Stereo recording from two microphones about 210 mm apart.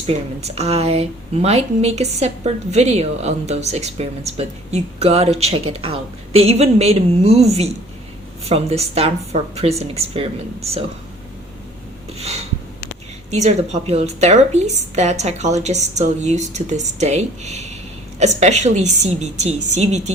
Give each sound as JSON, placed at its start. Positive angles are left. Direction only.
{"t": 0.4, "sound": "a woman's voice", "side_deg": -30}
{"t": 13.3, "sound": "a woman's voice", "side_deg": -30}